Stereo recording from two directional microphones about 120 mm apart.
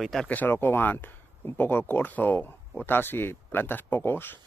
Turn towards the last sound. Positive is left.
turn(degrees=20)  # may be behind; listen again after turning